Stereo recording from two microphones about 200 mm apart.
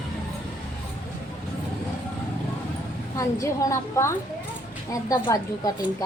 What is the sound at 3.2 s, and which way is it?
A woman's voice, 15° left (ahead or behind).